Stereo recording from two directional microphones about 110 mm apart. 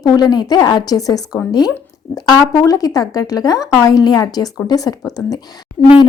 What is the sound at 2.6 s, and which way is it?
A woman's voice, 30° left (ahead or behind).